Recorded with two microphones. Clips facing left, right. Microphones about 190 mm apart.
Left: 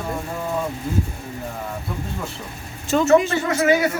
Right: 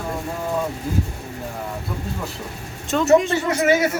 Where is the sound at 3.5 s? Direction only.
20° right (ahead or behind).